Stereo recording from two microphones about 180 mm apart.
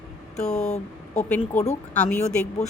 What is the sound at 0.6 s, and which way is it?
Speech, 40° left (ahead or behind).